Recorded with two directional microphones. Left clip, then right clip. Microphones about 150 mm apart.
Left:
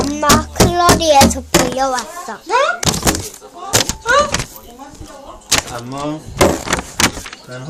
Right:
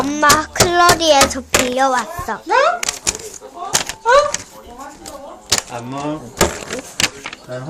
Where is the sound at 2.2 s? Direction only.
25° right (ahead or behind).